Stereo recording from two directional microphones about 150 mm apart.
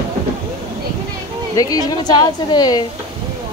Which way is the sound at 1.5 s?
25° left (ahead or behind).